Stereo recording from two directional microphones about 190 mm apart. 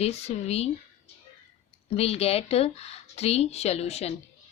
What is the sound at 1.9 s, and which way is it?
Speech, 35° left (ahead or behind).